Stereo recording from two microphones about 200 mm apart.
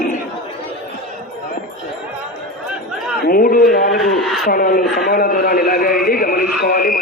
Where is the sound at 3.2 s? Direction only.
45° left (ahead or behind).